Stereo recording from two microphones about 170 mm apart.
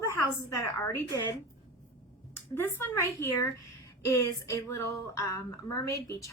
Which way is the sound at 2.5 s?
15° left (ahead or behind).